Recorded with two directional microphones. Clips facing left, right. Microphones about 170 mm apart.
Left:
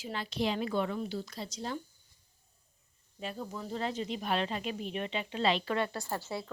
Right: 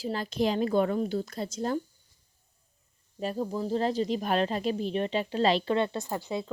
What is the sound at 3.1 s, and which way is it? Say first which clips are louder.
Speech: right 9 dB; 40° right (ahead or behind).